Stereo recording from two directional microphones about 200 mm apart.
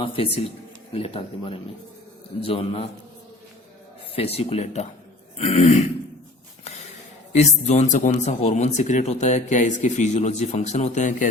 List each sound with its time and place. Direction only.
0.0 s speech: 30° left (ahead or behind)
4.1 s a man's voice: 30° left (ahead or behind)
7.3 s a man's voice: 35° left (ahead or behind)